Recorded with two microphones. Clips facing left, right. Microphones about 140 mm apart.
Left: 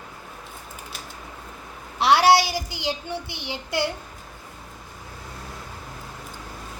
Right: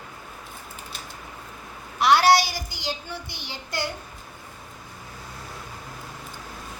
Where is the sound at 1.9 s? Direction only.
30° left (ahead or behind).